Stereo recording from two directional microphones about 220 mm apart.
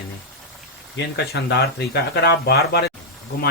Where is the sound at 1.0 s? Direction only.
50° left (ahead or behind).